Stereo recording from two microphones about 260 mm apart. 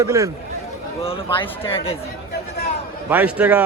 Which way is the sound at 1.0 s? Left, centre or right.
Centre.